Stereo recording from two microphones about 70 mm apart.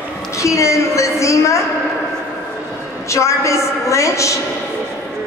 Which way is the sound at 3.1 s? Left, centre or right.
Left.